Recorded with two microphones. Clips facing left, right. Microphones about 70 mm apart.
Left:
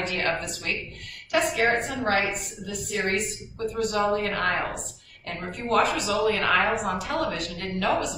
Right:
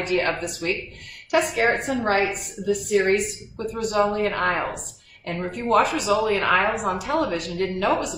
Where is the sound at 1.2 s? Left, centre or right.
Right.